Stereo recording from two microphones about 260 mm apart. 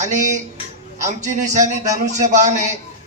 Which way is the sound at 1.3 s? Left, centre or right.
Right.